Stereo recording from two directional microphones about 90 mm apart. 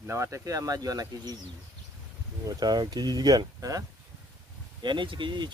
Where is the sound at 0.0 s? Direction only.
30° right (ahead or behind).